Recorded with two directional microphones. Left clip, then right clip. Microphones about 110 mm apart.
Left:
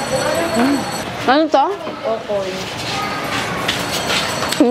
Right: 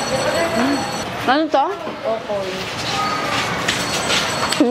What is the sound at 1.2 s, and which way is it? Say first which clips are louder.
Speech: left 3 dB; 20° right (ahead or behind).